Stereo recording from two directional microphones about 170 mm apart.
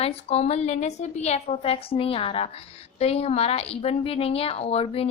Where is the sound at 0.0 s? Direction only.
35° left (ahead or behind).